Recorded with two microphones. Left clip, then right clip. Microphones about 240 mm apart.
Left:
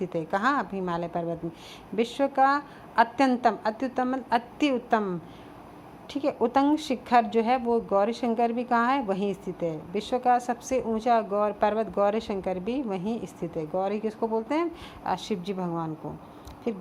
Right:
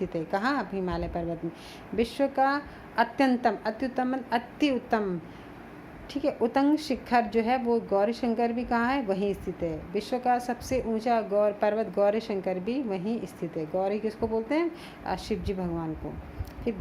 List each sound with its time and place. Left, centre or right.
0.0 s a woman's voice: left
6.1 s a woman's voice: left